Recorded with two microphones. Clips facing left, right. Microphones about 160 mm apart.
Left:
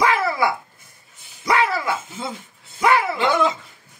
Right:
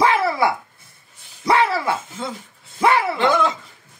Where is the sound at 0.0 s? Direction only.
30° right (ahead or behind).